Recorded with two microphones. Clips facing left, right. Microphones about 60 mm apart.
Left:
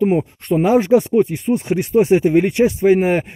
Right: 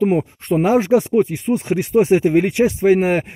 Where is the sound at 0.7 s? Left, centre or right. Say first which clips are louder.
Left 2 dB; right.